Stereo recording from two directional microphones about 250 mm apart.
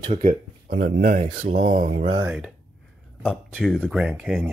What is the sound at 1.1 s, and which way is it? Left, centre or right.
Speech, right.